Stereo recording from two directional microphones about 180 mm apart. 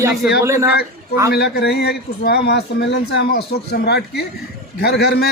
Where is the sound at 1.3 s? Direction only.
65° left (ahead or behind).